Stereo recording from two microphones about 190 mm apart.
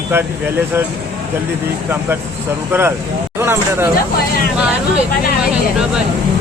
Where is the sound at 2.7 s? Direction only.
10° right (ahead or behind).